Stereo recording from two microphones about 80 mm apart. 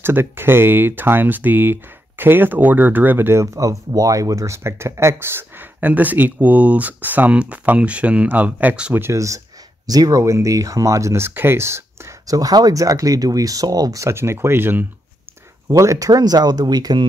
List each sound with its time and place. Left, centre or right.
0.0 s speech: right
3.5 s speech: right; by 8.9 s centre
9.1 s speech: right
12.3 s speech: right
14.0 s speech: right
15.7 s speech: right